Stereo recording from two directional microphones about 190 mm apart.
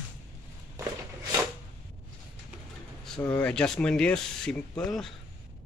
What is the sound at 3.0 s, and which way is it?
Speech, 5° left (ahead or behind).